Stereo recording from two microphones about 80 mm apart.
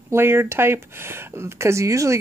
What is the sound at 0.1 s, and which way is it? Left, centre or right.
Speech, right.